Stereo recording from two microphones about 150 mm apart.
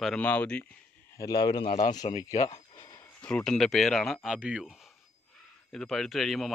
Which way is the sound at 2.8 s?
30° left (ahead or behind).